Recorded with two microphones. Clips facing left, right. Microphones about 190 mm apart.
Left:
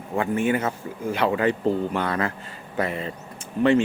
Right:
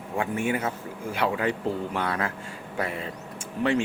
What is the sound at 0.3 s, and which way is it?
A man's voice, 5° right (ahead or behind).